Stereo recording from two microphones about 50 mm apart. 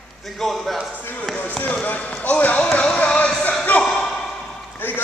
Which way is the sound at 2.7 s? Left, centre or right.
Left.